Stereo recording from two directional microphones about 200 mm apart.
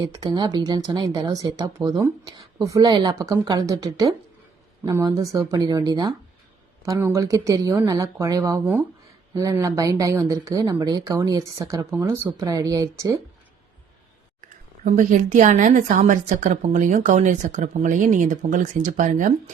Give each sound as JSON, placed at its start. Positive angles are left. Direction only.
{"t": 0.0, "sound": "speech", "side_deg": -20}
{"t": 14.8, "sound": "a woman's voice", "side_deg": -40}